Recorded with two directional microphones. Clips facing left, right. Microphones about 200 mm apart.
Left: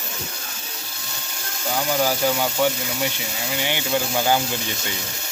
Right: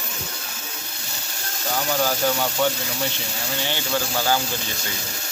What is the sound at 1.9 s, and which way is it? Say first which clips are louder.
Speech: left 1 dB; 10° left (ahead or behind).